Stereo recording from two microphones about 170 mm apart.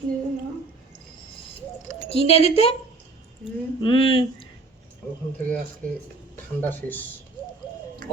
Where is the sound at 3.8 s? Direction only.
30° left (ahead or behind).